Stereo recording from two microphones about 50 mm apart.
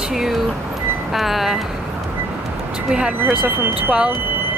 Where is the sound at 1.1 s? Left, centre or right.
Centre.